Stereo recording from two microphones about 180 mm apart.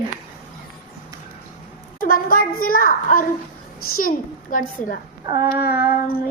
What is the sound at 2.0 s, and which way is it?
A child's voice, 50° left (ahead or behind).